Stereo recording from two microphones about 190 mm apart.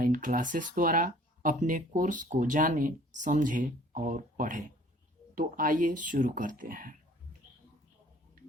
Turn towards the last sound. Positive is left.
turn(degrees=-45)  # may be behind; listen again after turning